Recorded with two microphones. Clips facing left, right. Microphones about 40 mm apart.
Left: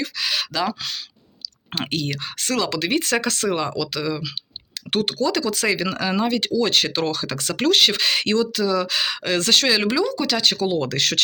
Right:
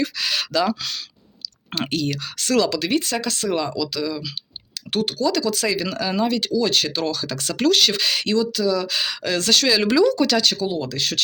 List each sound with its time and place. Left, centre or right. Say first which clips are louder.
0.0 s speech: right 1 dB; centre
2.2 s speech: right 4 dB; left
3.0 s speech: left 3 dB; left
3.5 s speech: right 1 dB; left
3.8 s speech: even; left
8.9 s speech: left 1 dB; left
9.8 s speech: right 4 dB; centre
10.6 s speech: left 3 dB; left